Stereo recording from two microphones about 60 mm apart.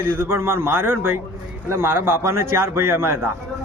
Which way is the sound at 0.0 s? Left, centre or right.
Right.